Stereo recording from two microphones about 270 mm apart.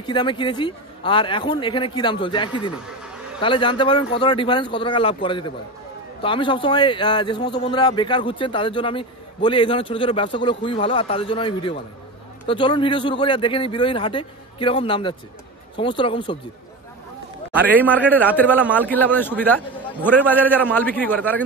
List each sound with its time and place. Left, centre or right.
0.0 s a man's voice: centre
17.8 s a man's voice: centre